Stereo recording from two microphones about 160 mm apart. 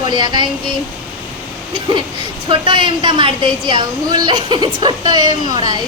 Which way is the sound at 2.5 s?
30° right (ahead or behind).